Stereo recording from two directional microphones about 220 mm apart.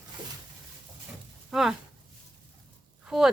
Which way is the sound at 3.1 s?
Centre (ahead or behind).